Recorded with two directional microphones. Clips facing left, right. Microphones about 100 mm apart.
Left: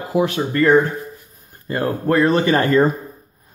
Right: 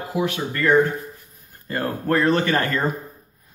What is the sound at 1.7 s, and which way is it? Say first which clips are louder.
Speech: left 4 dB; 10° left (ahead or behind).